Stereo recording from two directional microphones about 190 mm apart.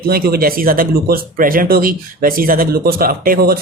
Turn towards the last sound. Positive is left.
turn(degrees=-50)  # may be behind; listen again after turning